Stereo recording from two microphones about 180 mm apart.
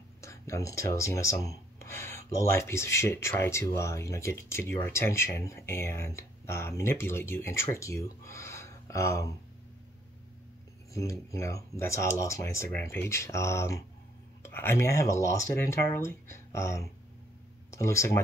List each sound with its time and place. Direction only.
0.2 s speech: 15° left (ahead or behind)
10.9 s speech: 15° left (ahead or behind)